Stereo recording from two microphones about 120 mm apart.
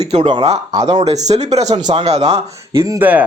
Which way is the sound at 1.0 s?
65° right (ahead or behind).